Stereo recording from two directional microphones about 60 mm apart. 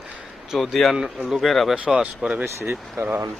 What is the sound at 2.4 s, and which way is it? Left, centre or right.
Speech, right.